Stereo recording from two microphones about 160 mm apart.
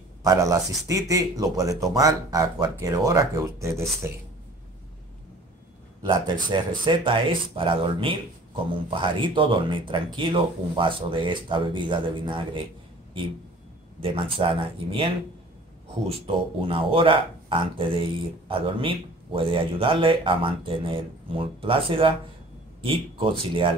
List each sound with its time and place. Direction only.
0.2 s speech: 20° right (ahead or behind)
6.0 s speech: 30° right (ahead or behind)
14.0 s speech: 35° right (ahead or behind)
16.1 s speech: 35° right (ahead or behind)